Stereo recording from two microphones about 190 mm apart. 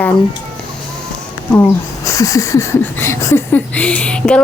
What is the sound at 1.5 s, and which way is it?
Speech, 15° left (ahead or behind).